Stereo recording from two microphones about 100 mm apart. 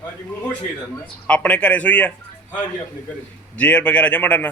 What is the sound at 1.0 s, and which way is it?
A man's voice, 10° left (ahead or behind).